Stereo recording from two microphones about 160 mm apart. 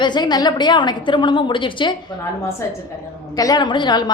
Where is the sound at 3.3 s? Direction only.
25° left (ahead or behind).